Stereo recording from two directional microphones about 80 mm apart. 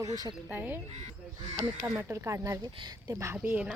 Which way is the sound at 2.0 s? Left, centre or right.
Right.